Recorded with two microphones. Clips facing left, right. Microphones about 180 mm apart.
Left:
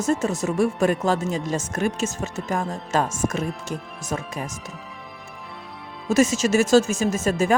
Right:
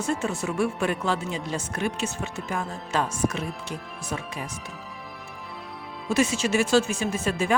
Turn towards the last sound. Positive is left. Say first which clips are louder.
# left 4 dB
turn(degrees=45)  # may be behind; listen again after turning